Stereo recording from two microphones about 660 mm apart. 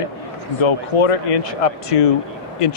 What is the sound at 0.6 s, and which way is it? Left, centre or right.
Speech, left.